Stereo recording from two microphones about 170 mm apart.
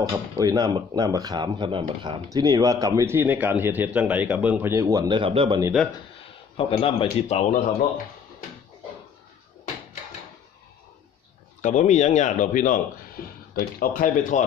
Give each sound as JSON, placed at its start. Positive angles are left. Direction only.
{"t": 0.1, "sound": "speech", "side_deg": -20}
{"t": 6.5, "sound": "speech", "side_deg": 35}
{"t": 11.6, "sound": "speech", "side_deg": 45}